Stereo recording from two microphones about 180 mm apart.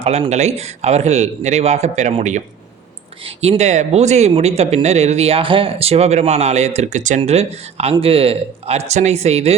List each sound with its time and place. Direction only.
0.0 s speech: 35° right (ahead or behind)